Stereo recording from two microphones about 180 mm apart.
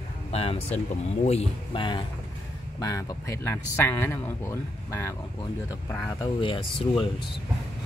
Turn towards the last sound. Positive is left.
turn(degrees=25)  # may be behind; listen again after turning